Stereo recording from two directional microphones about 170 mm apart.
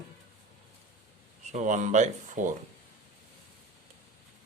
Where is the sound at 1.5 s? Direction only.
45° right (ahead or behind).